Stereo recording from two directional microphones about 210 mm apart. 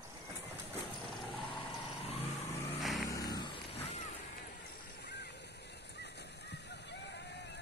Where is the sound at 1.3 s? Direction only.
25° left (ahead or behind).